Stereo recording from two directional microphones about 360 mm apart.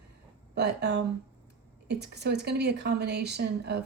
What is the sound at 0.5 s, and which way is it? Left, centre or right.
Speech, right.